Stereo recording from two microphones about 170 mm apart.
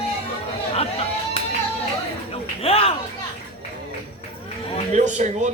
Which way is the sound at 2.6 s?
35° left (ahead or behind).